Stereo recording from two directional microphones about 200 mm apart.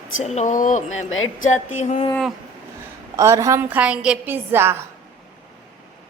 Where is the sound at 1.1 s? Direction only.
85° left.